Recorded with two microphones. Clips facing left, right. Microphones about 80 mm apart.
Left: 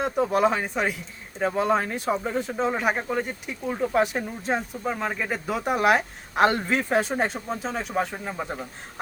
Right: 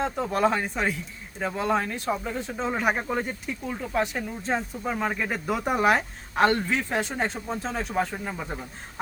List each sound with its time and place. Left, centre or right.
0.0 s speech: centre
2.6 s speech: centre
3.4 s speech: centre
4.5 s speech: centre